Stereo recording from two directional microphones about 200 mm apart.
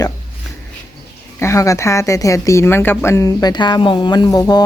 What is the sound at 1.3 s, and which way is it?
Speech, 15° left (ahead or behind).